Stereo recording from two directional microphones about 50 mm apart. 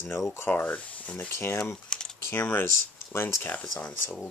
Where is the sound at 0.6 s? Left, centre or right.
Left.